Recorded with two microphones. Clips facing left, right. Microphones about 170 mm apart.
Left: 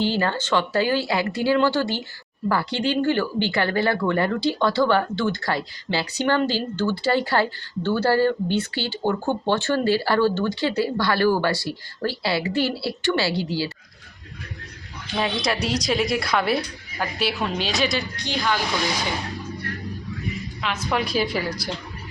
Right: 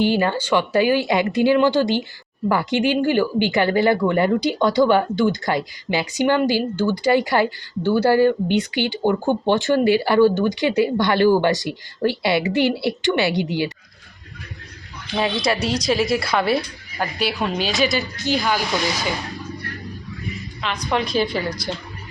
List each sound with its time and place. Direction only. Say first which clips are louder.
0.0 s speech: right 4 dB; 15° right (ahead or behind)
15.2 s a woman's voice: right 3 dB; centre (ahead or behind)
20.6 s a woman's voice: right 3 dB; 5° left (ahead or behind)